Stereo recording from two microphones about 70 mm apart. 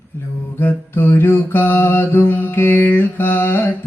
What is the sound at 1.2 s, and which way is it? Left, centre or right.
Mantra, left.